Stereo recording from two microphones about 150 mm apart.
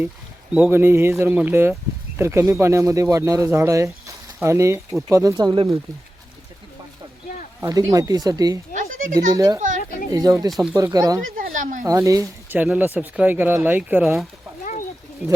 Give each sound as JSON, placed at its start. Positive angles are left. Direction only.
{"t": 0.5, "sound": "speech", "side_deg": -10}
{"t": 7.6, "sound": "speech", "side_deg": -20}
{"t": 9.6, "sound": "a sound", "side_deg": -60}
{"t": 10.1, "sound": "speech", "side_deg": -25}
{"t": 10.5, "sound": "speech", "side_deg": 0}
{"t": 10.8, "sound": "speech", "side_deg": -25}
{"t": 11.3, "sound": "a sound", "side_deg": -65}
{"t": 11.9, "sound": "speech", "side_deg": -20}
{"t": 14.0, "sound": "speech", "side_deg": 0}
{"t": 14.6, "sound": "a sound", "side_deg": 60}